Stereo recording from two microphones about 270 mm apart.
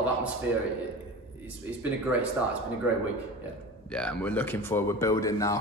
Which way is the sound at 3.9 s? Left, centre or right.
Centre.